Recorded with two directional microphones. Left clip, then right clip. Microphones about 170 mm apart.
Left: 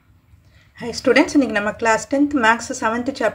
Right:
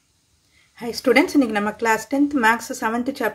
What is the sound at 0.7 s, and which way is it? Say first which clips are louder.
A woman's voice: left 2 dB; 35° right (ahead or behind).